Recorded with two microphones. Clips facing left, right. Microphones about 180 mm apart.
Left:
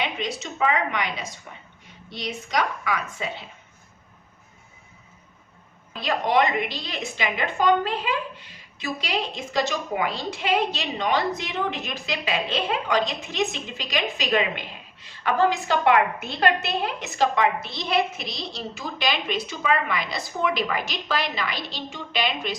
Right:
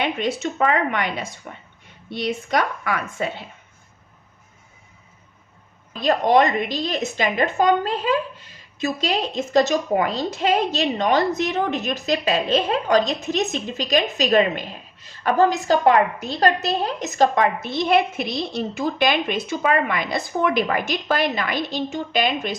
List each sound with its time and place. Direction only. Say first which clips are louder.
0.0 s a woman's voice: right 6 dB; 55° right (ahead or behind)
6.0 s a woman's voice: right 5 dB; 45° right (ahead or behind)